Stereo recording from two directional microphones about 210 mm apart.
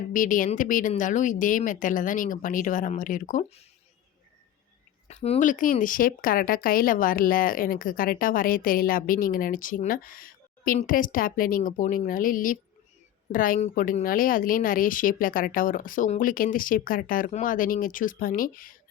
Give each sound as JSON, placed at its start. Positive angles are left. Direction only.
{"t": 0.1, "sound": "speech", "side_deg": 40}
{"t": 5.0, "sound": "speech", "side_deg": 30}